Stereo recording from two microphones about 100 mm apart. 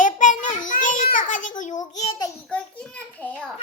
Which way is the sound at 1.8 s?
40° left (ahead or behind).